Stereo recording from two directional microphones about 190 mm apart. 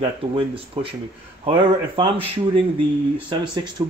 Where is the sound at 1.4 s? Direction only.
30° right (ahead or behind).